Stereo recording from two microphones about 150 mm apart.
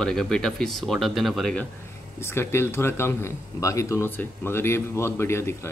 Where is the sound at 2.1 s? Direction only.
15° left (ahead or behind).